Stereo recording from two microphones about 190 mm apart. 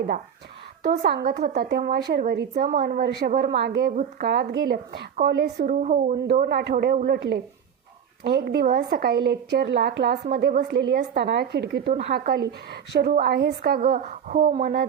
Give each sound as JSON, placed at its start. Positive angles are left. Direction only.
{"t": 0.9, "sound": "a woman's voice", "side_deg": -55}
{"t": 5.8, "sound": "a woman's voice", "side_deg": -40}